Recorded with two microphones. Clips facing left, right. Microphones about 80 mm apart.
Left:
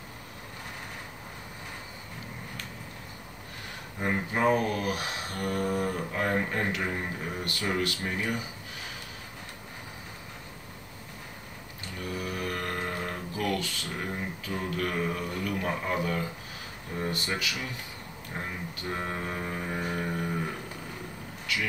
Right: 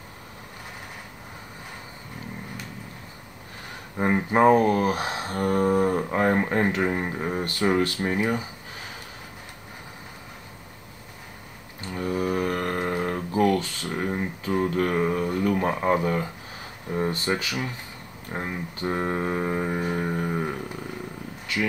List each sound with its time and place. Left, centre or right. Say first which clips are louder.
4.0 s speech: right 8 dB; right
11.9 s mantra: right 9 dB; right
12.8 s a sound: right 7 dB; right
15.4 s speech: right 8 dB; right
21.5 s speech: right 5 dB; right